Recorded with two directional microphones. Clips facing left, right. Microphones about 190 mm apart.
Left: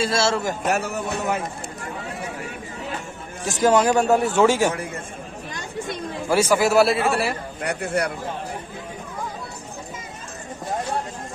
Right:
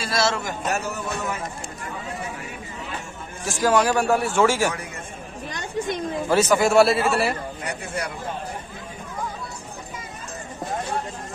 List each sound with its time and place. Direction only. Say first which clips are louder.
0.0 s speech: left 3 dB; 25° left (ahead or behind)
0.7 s speech: left 1 dB; 60° left (ahead or behind)
3.4 s speech: left 2 dB; 20° left (ahead or behind)
6.2 s a man's voice: left 1 dB; 10° left (ahead or behind)
7.6 s speech: left 8 dB; 60° left (ahead or behind)